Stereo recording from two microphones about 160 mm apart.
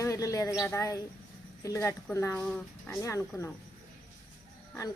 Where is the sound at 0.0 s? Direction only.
20° left (ahead or behind).